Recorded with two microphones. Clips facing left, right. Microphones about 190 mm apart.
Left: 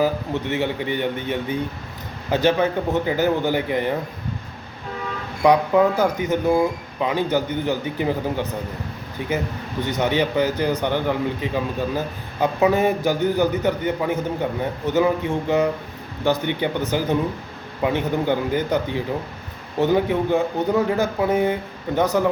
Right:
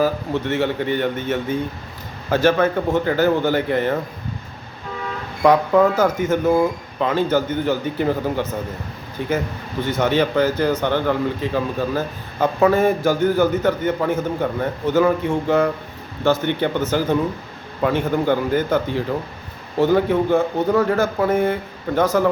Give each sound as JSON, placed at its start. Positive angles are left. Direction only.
{"t": 0.4, "sound": "speech", "side_deg": 15}
{"t": 5.4, "sound": "speech", "side_deg": 15}
{"t": 9.8, "sound": "speech", "side_deg": 15}